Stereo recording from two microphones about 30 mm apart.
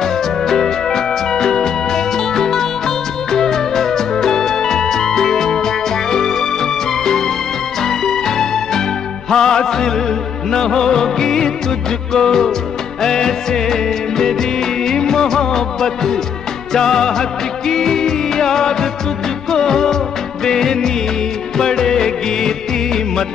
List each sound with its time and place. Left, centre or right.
0.0 s music: centre
20.4 s music of bollywood: centre